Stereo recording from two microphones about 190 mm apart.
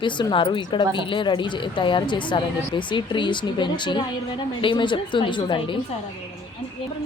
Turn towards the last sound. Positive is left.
turn(degrees=25)  # may be behind; listen again after turning